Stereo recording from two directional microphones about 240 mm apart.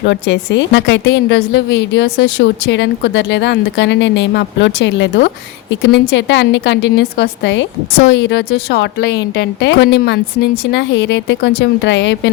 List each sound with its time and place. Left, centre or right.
0.0 s a woman's voice: left